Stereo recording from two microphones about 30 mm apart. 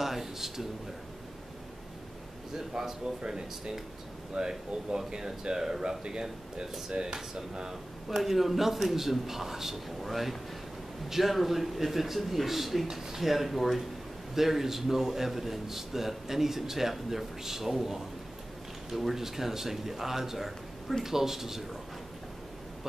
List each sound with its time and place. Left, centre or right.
0.0 s a man's voice: centre
2.5 s speech: centre
8.1 s a man's voice: centre